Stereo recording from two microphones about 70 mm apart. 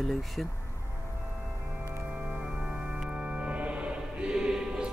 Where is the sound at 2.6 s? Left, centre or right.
Centre.